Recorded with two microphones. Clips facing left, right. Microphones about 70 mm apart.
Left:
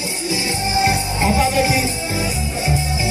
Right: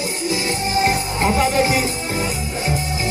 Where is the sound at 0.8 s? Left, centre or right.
Right.